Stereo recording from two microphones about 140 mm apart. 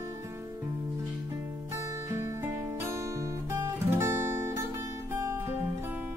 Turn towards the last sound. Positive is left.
turn(degrees=-15)  # may be behind; listen again after turning